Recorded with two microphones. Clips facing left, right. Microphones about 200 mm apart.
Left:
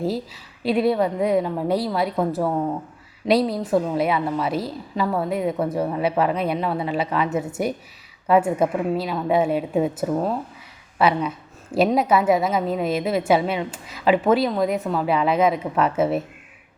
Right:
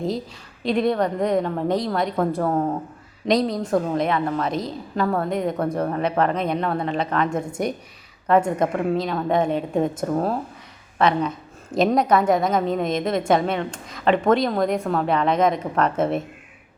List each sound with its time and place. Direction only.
0.6 s a woman's voice: 5° left (ahead or behind)